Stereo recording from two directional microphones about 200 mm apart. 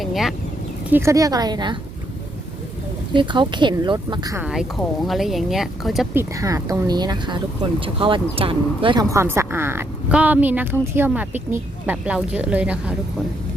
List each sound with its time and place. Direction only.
0.0 s speech: centre (ahead or behind)
0.9 s speech: 10° right (ahead or behind)
3.1 s speech: 25° right (ahead or behind)
5.0 s speech: centre (ahead or behind)
6.3 s speech: 15° right (ahead or behind)